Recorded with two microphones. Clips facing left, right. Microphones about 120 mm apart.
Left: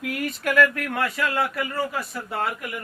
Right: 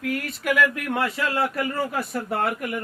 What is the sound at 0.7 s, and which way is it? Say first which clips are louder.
Speech: right 1 dB; 20° right (ahead or behind).